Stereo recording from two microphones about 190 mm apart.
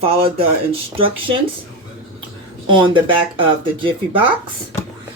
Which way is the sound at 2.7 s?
25° right (ahead or behind).